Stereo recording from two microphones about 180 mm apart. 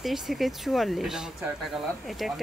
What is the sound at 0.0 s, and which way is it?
Speech, centre (ahead or behind).